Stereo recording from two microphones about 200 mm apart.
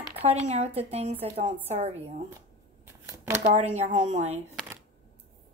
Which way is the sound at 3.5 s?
40° right (ahead or behind).